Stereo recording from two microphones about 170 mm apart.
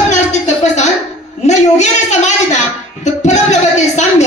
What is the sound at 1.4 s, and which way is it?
A woman's voice, 40° left (ahead or behind).